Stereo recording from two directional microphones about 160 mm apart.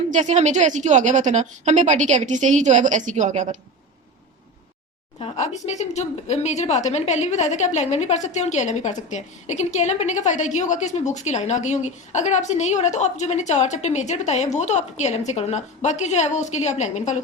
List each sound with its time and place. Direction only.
0.1 s a woman's voice: 50° right (ahead or behind)
5.2 s a woman's voice: 45° left (ahead or behind)